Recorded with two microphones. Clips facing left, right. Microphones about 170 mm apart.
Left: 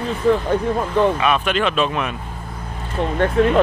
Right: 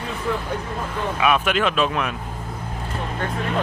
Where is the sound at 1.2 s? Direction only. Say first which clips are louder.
Left 1 dB; 5° right (ahead or behind).